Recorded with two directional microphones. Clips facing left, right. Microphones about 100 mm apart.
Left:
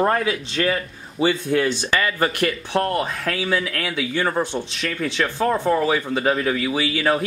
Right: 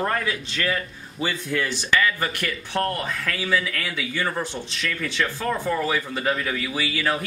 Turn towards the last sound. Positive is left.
turn(degrees=25)  # may be behind; listen again after turning